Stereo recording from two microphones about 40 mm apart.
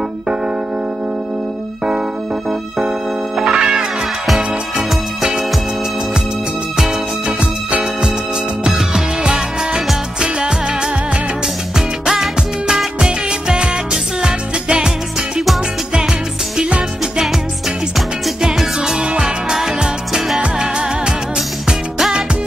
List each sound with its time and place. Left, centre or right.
3.4 s music: right
4.4 s music: centre
9.2 s music: centre
18.4 s music: centre
18.9 s music: right
19.2 s music: centre
20.3 s music: right